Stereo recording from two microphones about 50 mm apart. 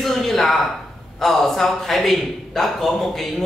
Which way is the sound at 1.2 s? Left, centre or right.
Centre.